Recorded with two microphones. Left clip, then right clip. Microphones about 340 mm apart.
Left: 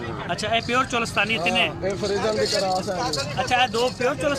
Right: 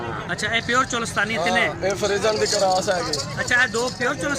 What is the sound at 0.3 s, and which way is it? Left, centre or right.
Speech, centre.